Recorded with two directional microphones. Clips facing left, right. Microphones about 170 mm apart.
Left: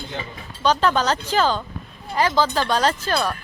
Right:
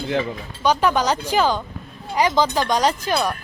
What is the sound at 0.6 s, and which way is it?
Speech, 10° right (ahead or behind).